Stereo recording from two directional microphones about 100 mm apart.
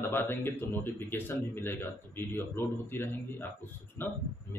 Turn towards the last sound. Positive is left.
turn(degrees=25)  # may be behind; listen again after turning